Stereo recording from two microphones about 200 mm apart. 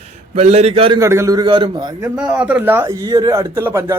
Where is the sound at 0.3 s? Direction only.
30° right (ahead or behind).